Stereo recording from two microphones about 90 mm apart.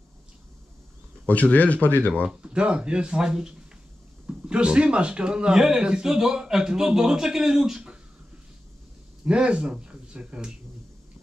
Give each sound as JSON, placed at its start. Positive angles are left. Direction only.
{"t": 1.2, "sound": "speech", "side_deg": 15}
{"t": 2.2, "sound": "speech", "side_deg": -10}
{"t": 9.2, "sound": "speech", "side_deg": -10}